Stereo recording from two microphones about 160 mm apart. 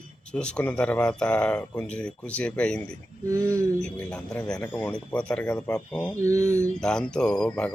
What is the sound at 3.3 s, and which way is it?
Speech, 20° right (ahead or behind).